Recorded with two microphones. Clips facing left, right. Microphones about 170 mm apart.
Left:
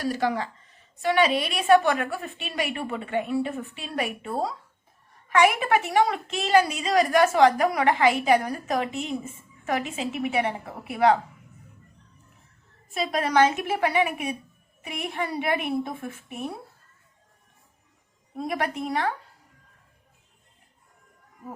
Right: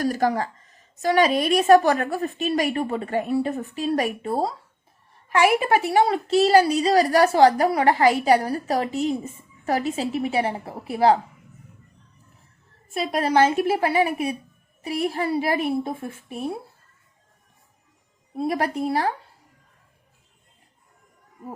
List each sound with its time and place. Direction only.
0.0 s a woman's voice: 45° right (ahead or behind)
5.5 s a woman's voice: 30° right (ahead or behind)
13.2 s a woman's voice: 30° right (ahead or behind)
18.3 s a woman's voice: 30° right (ahead or behind)